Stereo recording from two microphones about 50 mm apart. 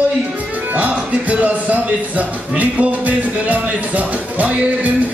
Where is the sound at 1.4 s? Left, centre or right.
Right.